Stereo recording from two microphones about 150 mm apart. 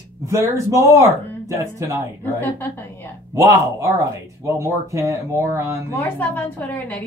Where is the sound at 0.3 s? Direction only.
20° right (ahead or behind).